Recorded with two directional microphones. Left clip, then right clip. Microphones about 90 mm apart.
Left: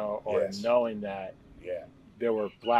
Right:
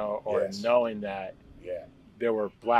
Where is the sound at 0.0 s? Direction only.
30° right (ahead or behind).